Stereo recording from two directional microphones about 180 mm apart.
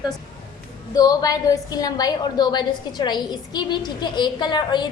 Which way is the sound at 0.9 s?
20° left (ahead or behind).